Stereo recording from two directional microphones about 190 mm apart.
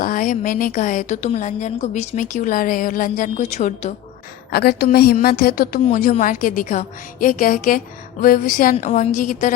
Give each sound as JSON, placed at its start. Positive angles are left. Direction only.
{"t": 0.0, "sound": "a woman's voice", "side_deg": 45}
{"t": 4.5, "sound": "a woman's voice", "side_deg": 55}